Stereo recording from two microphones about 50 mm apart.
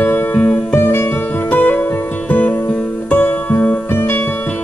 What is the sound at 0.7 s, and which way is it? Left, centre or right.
Music, left.